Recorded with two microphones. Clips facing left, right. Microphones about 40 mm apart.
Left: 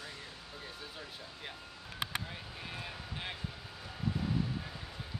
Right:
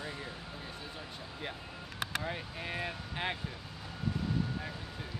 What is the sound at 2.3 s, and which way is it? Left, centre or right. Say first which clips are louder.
Speech: right 6 dB; right.